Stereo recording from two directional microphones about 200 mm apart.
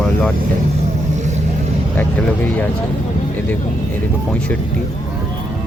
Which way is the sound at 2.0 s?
10° left (ahead or behind).